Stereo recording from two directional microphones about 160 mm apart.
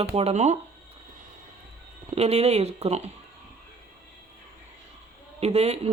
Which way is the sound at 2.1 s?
40° right (ahead or behind).